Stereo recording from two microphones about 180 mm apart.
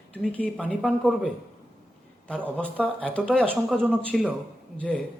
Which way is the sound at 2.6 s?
10° left (ahead or behind).